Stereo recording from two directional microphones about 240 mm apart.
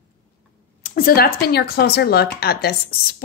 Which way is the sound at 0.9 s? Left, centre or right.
Left.